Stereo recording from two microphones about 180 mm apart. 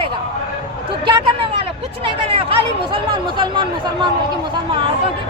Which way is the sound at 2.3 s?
30° right (ahead or behind).